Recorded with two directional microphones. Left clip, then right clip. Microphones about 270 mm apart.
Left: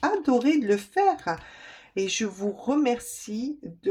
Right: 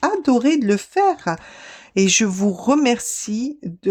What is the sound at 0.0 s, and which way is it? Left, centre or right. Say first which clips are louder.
Speech: right 5 dB; right.